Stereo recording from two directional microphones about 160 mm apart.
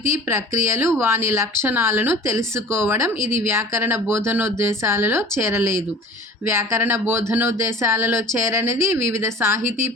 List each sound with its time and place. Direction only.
0.1 s speech: 15° right (ahead or behind)